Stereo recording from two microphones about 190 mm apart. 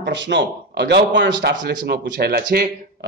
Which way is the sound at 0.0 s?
70° right (ahead or behind).